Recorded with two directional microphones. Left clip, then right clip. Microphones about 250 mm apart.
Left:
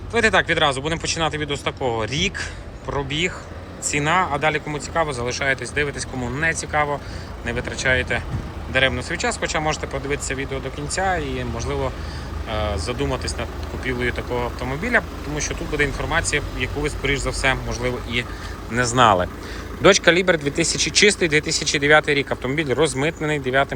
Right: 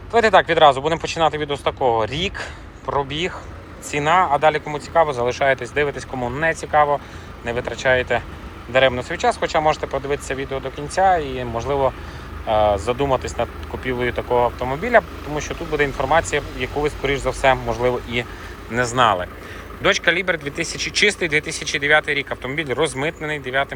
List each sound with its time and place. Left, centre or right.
0.1 s speech: centre
18.7 s speech: centre